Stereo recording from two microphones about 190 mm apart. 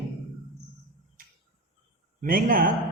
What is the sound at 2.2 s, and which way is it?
Speech, 45° right (ahead or behind).